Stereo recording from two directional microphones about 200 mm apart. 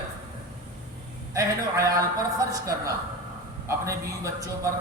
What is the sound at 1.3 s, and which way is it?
A man's voice, 15° right (ahead or behind).